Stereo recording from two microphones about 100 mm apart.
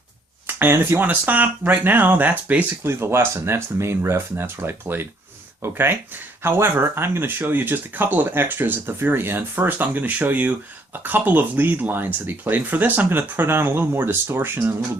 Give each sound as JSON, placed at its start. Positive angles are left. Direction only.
{"t": 0.4, "sound": "speech", "side_deg": -20}
{"t": 2.8, "sound": "speech", "side_deg": -25}